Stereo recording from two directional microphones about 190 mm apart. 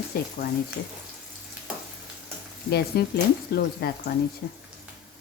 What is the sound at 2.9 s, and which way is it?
Speech, 55° left (ahead or behind).